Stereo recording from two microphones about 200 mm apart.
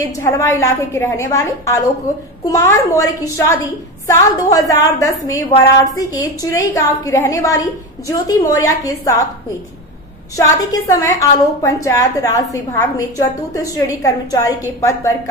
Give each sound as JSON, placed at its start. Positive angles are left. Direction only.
{"t": 0.0, "sound": "a woman's voice", "side_deg": 15}
{"t": 10.3, "sound": "a woman's voice", "side_deg": 15}